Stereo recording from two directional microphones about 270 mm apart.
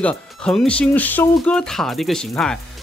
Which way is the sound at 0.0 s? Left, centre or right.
Centre.